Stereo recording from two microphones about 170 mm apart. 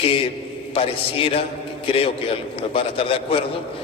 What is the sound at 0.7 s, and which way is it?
Speech, 35° left (ahead or behind).